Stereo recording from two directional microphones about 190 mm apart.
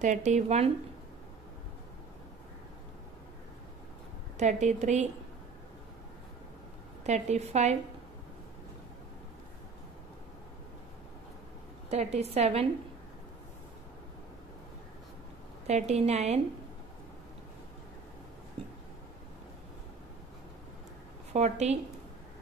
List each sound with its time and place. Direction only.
0.0 s a woman's voice: 40° right (ahead or behind)
4.4 s a woman's voice: 40° right (ahead or behind)
7.1 s a woman's voice: 35° right (ahead or behind)
11.9 s a woman's voice: 35° right (ahead or behind)
15.6 s a woman's voice: 35° right (ahead or behind)
18.6 s a sound: 30° right (ahead or behind)
21.3 s a woman's voice: 35° right (ahead or behind)